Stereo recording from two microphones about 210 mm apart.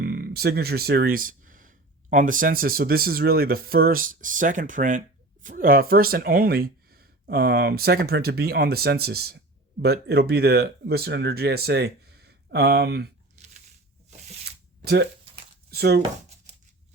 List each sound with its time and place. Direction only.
0.0 s speech: 45° right (ahead or behind)
14.4 s zipper: 50° right (ahead or behind)
15.7 s speech: 50° right (ahead or behind)